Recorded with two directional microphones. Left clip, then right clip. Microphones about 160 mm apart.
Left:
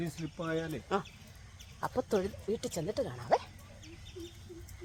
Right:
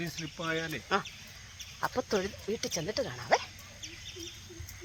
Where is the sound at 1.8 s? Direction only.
20° right (ahead or behind).